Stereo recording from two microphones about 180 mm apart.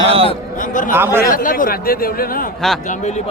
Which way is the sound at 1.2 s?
50° left (ahead or behind).